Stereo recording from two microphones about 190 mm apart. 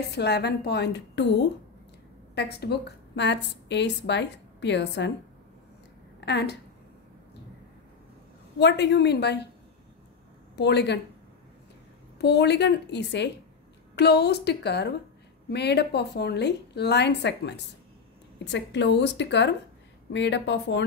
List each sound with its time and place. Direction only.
0.1 s a woman's voice: 60° left (ahead or behind)
6.2 s a woman's voice: 60° left (ahead or behind)
8.5 s a woman's voice: 65° left (ahead or behind)
10.5 s speech: 60° left (ahead or behind)
12.2 s a woman's voice: 60° left (ahead or behind)